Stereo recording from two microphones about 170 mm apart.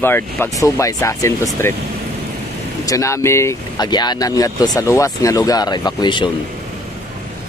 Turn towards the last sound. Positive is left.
turn(degrees=25)  # may be behind; listen again after turning